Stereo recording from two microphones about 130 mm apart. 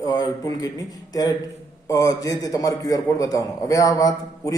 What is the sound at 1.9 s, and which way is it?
A man's voice, 25° left (ahead or behind).